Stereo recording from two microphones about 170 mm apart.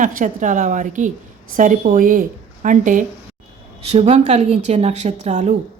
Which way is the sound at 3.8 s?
40° right (ahead or behind).